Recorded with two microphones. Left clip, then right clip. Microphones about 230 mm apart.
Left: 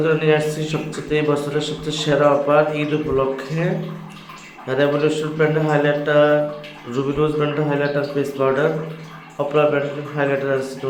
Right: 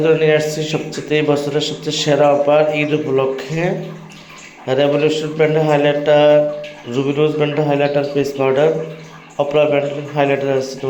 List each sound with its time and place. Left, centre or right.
0.0 s a man's voice: centre
4.7 s a man's voice: centre